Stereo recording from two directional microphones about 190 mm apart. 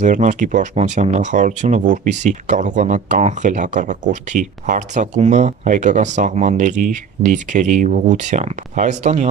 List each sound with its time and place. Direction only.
0.0 s speech: 40° right (ahead or behind)